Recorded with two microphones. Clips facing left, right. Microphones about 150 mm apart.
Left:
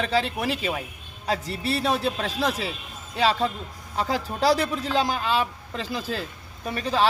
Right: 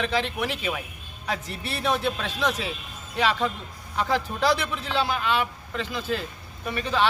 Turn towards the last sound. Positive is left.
turn(degrees=40)  # may be behind; listen again after turning